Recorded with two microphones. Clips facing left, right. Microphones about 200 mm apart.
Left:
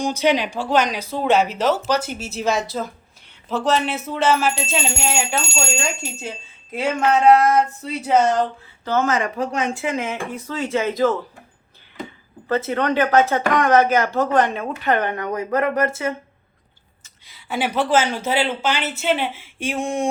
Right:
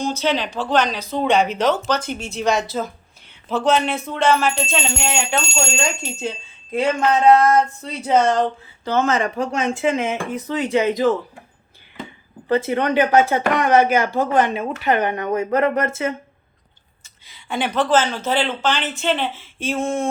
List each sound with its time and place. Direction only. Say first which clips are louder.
0.0 s a woman's voice: left 2 dB; 15° left (ahead or behind)
8.8 s speech: right 1 dB; 15° right (ahead or behind)
9.0 s speech: right 1 dB; 30° right (ahead or behind)
12.5 s speech: right 2 dB; 15° right (ahead or behind)
17.2 s a woman's voice: even; 5° left (ahead or behind)